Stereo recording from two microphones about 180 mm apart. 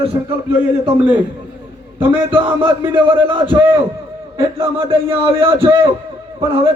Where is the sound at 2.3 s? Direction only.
30° right (ahead or behind).